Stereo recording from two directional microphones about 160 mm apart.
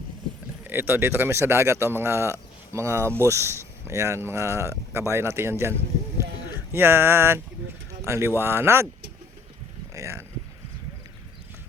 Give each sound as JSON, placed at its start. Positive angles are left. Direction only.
{"t": 0.6, "sound": "speech", "side_deg": -15}
{"t": 6.7, "sound": "speech", "side_deg": -15}
{"t": 9.9, "sound": "a sound", "side_deg": -20}